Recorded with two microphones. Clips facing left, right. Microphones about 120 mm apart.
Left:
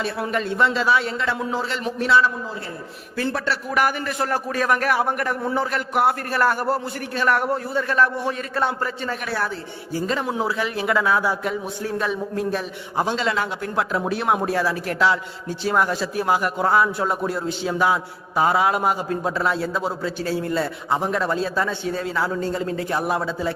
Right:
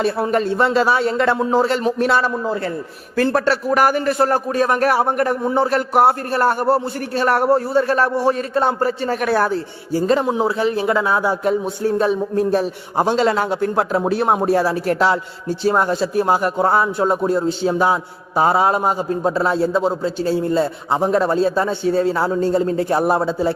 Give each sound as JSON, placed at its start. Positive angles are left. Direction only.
{"t": 0.0, "sound": "a man's voice", "side_deg": -40}
{"t": 5.4, "sound": "a man's voice", "side_deg": -20}
{"t": 5.7, "sound": "a man's voice", "side_deg": -35}
{"t": 9.2, "sound": "a man's voice", "side_deg": -50}
{"t": 10.2, "sound": "a man's voice", "side_deg": -25}